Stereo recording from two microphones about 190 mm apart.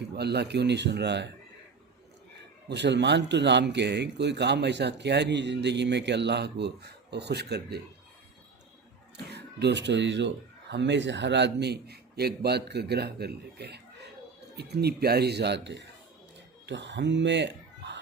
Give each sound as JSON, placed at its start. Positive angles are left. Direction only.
{"t": 0.2, "sound": "speech", "side_deg": -60}
{"t": 2.6, "sound": "speech", "side_deg": -65}
{"t": 9.1, "sound": "speech", "side_deg": -65}